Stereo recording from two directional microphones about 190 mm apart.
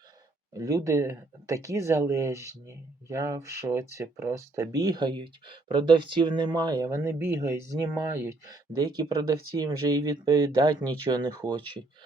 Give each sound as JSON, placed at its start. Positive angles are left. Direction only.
{"t": 0.5, "sound": "speech", "side_deg": -15}